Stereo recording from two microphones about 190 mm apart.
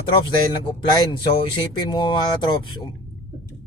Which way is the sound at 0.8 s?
25° left (ahead or behind).